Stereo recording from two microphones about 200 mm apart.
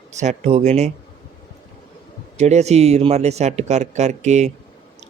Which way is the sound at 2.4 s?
35° right (ahead or behind).